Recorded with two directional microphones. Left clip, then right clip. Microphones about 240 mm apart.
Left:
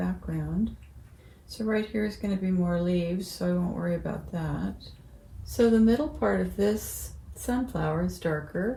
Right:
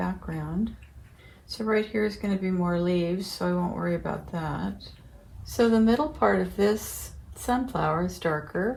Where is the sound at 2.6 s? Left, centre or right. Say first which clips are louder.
Right 3 dB; right.